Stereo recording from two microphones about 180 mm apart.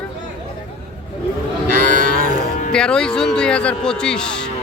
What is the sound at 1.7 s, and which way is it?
Livestock, 50° right (ahead or behind).